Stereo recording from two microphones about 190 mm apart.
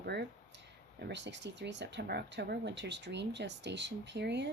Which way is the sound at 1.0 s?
65° right (ahead or behind).